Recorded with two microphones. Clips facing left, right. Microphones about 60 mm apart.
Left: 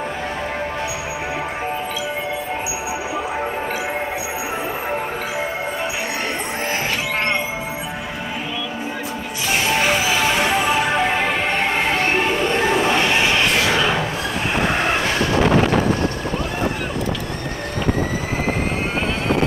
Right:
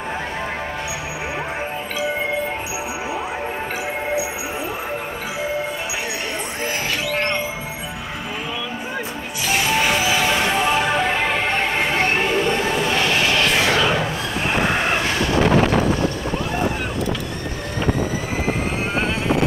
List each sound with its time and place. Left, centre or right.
10.1 s music: centre
13.0 s music: centre